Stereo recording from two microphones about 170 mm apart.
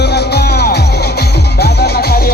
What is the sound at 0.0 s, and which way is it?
Music, 70° left (ahead or behind).